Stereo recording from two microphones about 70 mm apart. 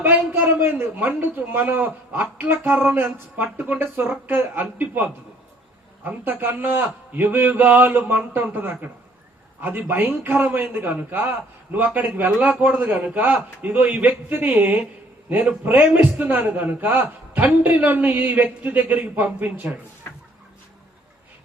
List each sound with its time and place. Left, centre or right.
0.0 s a man's voice: right
20.1 s chicken: left